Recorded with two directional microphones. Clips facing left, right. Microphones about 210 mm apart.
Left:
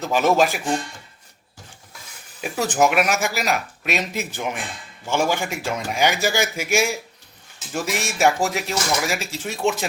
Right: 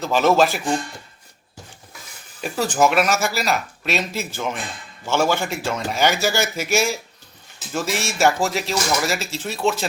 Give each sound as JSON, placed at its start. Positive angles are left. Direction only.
{"t": 0.0, "sound": "speech", "side_deg": 15}
{"t": 2.4, "sound": "speech", "side_deg": 15}